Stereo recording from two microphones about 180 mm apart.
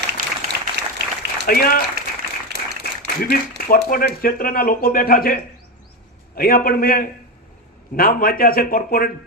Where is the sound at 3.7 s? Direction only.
55° left (ahead or behind).